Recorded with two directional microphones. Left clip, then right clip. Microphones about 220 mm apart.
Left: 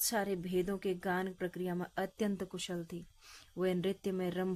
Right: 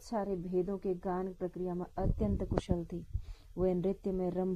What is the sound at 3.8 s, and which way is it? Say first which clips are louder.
Speech: right 2 dB; 30° left (ahead or behind).